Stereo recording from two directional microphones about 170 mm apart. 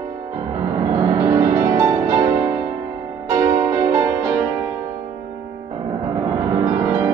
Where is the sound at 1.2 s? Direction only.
15° right (ahead or behind).